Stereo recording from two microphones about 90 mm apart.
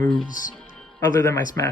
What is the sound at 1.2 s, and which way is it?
Speech, 25° left (ahead or behind).